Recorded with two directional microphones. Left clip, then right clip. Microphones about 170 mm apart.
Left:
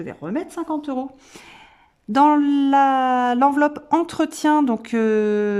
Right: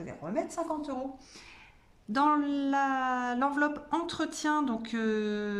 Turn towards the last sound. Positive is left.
turn(degrees=50)  # may be behind; listen again after turning